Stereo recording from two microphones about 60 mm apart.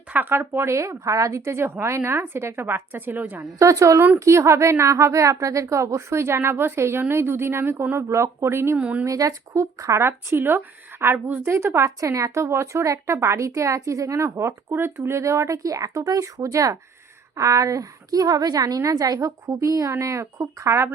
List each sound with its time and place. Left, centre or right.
0.1 s a woman's voice: right
1.4 s a woman's voice: right
3.6 s a woman's voice: right
8.8 s a woman's voice: right
9.0 s a woman's voice: right
10.0 s a woman's voice: right
11.9 s a woman's voice: right
15.2 s speech: right
16.0 s a woman's voice: right